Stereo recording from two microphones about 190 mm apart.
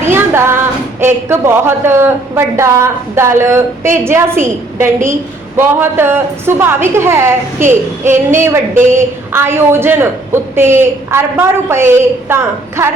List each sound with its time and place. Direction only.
0.0 s child singing: 10° right (ahead or behind)
1.0 s a woman's voice: 10° right (ahead or behind)